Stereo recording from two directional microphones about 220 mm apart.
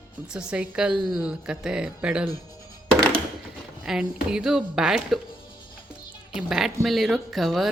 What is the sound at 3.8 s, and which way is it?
Speech, 5° right (ahead or behind).